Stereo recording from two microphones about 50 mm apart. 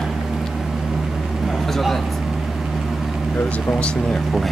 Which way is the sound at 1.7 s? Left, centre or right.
Centre.